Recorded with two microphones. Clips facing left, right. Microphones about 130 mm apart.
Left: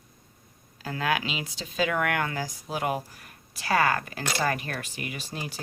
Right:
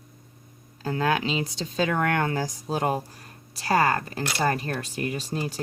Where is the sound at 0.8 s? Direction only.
35° right (ahead or behind).